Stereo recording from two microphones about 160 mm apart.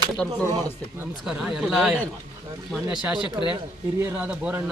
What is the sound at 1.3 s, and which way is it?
Speech, 5° right (ahead or behind).